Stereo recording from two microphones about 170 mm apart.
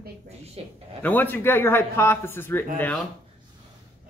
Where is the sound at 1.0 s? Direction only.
10° left (ahead or behind).